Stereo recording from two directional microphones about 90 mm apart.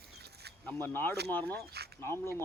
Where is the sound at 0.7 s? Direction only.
25° left (ahead or behind).